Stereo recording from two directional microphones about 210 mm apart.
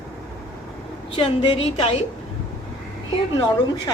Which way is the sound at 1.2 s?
25° left (ahead or behind).